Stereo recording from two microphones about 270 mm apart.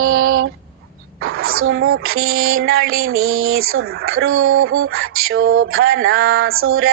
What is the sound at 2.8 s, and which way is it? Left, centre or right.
Female singing, right.